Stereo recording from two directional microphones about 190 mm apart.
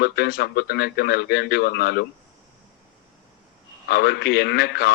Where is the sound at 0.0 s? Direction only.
60° left (ahead or behind).